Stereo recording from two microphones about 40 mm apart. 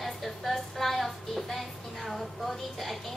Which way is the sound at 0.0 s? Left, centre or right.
Centre.